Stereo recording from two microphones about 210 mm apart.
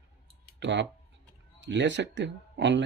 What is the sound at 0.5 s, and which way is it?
Speech, 55° right (ahead or behind).